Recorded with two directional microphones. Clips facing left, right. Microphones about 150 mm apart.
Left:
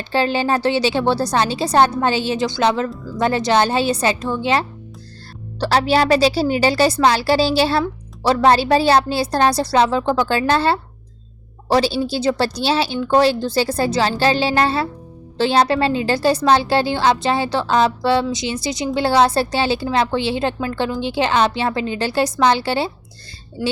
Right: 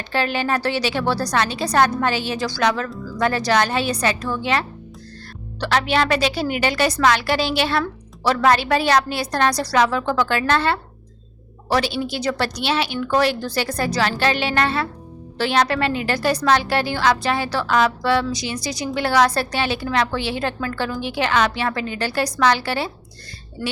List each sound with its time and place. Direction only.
0.0 s a woman's voice: 30° left (ahead or behind)
23.6 s speech: 10° left (ahead or behind)